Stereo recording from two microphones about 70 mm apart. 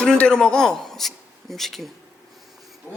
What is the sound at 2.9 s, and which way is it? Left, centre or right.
Wild animals, centre.